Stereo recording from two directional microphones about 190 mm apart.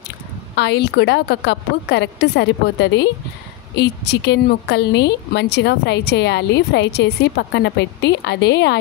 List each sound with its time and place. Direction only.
0.6 s a woman's voice: 60° left (ahead or behind)